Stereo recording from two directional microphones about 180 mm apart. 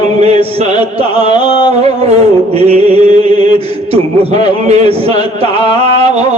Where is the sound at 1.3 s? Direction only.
25° left (ahead or behind).